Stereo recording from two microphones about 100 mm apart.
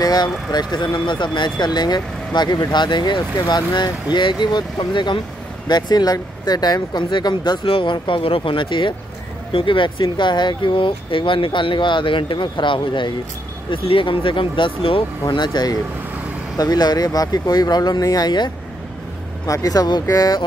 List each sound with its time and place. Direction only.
0.0 s speech: 40° left (ahead or behind); by 15.0 s 65° left (ahead or behind)
15.2 s speech: 45° left (ahead or behind)